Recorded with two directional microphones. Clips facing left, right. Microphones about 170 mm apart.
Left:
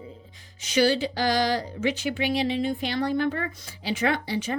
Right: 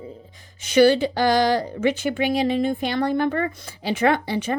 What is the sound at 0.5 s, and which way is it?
Speech, 55° right (ahead or behind).